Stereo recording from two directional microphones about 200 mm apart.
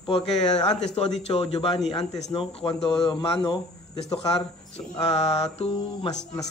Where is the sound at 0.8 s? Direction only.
30° left (ahead or behind).